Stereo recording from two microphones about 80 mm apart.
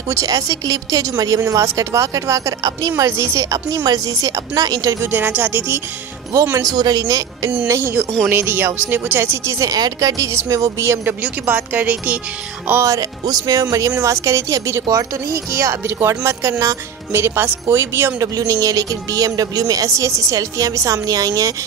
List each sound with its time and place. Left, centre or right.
0.1 s speech: right
5.0 s speech: right
6.8 s speech: right
7.6 s speech: right
9.7 s speech: right
11.4 s speech: right
12.8 s speech: right
17.1 s speech: right
18.3 s speech: right